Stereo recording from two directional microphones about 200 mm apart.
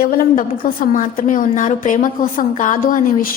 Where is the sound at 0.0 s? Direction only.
45° left (ahead or behind).